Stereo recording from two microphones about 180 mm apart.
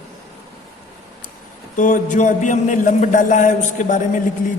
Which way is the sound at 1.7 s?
45° left (ahead or behind).